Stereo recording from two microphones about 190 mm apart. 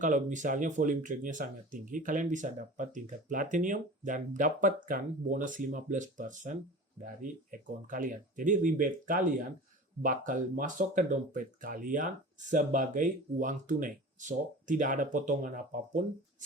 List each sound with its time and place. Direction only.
0.0 s speech: 40° right (ahead or behind)
7.9 s speech: 45° right (ahead or behind)